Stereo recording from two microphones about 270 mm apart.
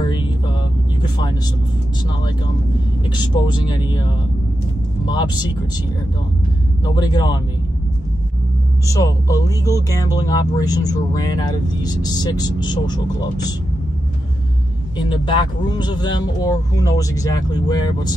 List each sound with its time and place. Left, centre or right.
0.1 s vehicle: centre
3.1 s speech: centre
6.8 s speech: centre
8.8 s speech: centre
15.0 s speech: centre